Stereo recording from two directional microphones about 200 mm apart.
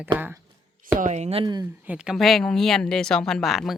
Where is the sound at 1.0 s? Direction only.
35° right (ahead or behind).